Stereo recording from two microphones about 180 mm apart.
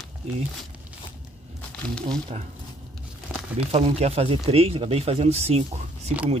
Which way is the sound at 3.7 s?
35° right (ahead or behind).